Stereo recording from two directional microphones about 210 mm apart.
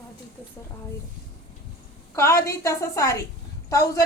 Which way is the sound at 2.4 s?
15° left (ahead or behind).